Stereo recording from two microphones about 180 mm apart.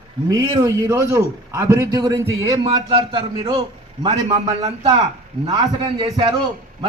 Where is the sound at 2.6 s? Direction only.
30° right (ahead or behind).